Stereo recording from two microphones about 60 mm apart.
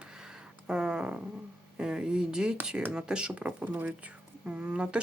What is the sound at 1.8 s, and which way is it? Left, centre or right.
Speech, centre.